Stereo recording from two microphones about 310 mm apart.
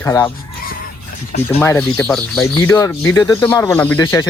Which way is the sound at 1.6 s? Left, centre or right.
Centre.